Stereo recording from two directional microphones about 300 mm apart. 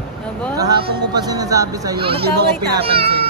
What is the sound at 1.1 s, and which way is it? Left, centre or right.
Speech, centre.